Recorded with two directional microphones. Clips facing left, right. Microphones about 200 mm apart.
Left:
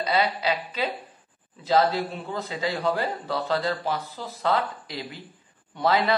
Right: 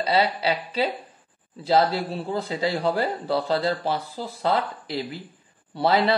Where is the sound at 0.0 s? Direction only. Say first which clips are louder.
Right 2 dB; 30° right (ahead or behind).